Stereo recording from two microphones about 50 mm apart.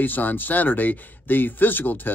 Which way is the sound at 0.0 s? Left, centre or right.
Left.